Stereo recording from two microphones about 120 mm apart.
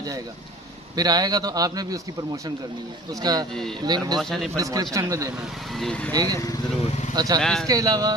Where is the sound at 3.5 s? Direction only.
5° left (ahead or behind).